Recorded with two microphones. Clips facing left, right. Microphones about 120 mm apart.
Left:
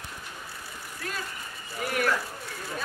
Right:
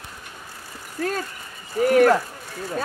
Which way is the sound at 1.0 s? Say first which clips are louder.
Right 10 dB; 45° right (ahead or behind).